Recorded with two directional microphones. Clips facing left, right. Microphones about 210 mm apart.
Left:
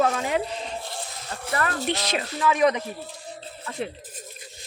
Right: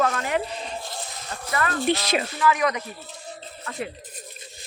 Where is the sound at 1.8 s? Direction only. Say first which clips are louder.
Right 4 dB; 10° right (ahead or behind).